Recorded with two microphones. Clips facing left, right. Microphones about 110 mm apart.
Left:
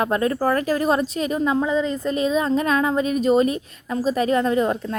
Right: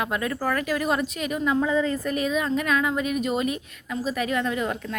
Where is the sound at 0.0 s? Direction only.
35° left (ahead or behind).